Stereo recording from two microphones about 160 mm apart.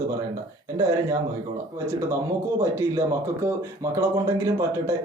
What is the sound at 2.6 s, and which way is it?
Speech, 20° right (ahead or behind).